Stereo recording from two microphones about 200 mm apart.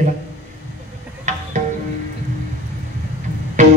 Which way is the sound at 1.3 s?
35° right (ahead or behind).